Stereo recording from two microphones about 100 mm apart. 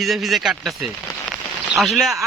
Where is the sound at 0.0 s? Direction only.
Centre (ahead or behind).